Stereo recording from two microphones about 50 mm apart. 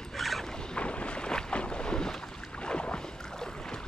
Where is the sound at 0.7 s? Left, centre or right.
Left.